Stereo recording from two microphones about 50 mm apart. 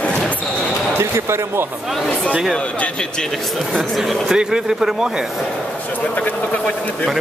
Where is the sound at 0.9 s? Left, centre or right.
Right.